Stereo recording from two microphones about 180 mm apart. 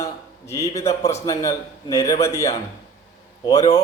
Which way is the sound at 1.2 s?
20° left (ahead or behind).